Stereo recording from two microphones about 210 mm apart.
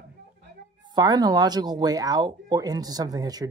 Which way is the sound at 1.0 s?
20° right (ahead or behind).